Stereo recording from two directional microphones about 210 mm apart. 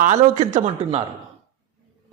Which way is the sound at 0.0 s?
35° right (ahead or behind).